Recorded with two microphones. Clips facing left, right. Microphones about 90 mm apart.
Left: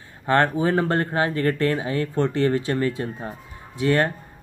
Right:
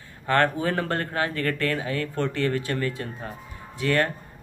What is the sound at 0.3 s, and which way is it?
Speech, 25° left (ahead or behind).